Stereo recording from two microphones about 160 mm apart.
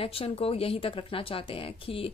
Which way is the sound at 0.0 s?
35° left (ahead or behind).